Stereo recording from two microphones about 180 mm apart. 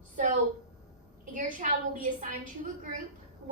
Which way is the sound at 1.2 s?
45° right (ahead or behind).